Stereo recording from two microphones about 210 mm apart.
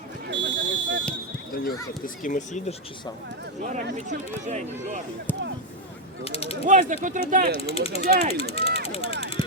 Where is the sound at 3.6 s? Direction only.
35° right (ahead or behind).